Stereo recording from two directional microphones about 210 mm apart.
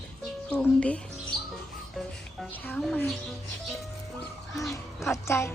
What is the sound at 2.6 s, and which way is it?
Speech, 10° left (ahead or behind).